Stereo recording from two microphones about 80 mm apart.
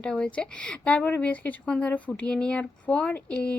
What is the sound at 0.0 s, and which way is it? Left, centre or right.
A woman's voice, centre.